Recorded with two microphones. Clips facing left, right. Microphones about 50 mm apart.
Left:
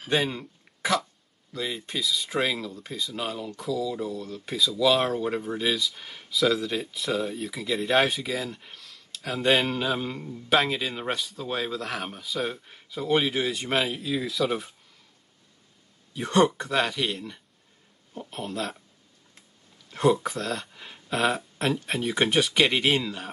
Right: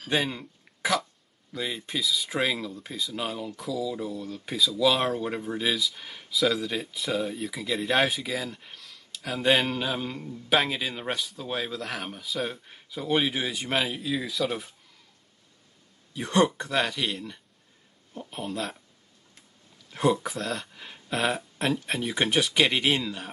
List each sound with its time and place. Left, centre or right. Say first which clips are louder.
0.1 s speech: left 2 dB; centre
16.1 s speech: left 2 dB; centre
19.9 s speech: left 2 dB; centre